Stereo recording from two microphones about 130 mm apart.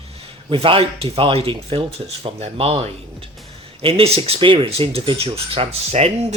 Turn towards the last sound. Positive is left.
turn(degrees=-55)  # may be behind; listen again after turning